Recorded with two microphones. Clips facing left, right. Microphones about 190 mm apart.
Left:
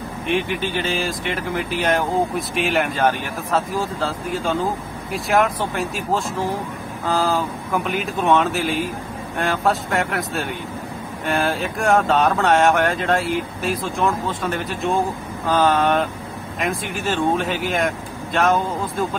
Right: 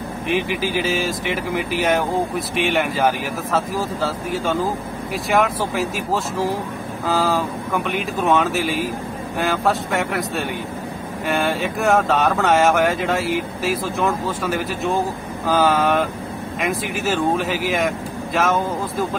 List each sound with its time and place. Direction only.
0.3 s speech: 5° right (ahead or behind)